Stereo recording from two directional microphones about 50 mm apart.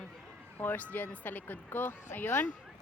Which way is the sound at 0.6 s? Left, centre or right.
Left.